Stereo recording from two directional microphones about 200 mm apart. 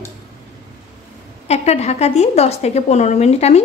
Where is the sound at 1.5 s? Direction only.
35° left (ahead or behind).